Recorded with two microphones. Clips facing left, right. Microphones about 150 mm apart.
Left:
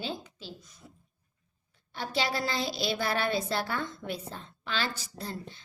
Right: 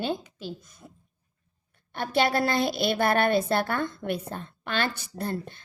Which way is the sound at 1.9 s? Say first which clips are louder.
Right 7 dB; 55° right (ahead or behind).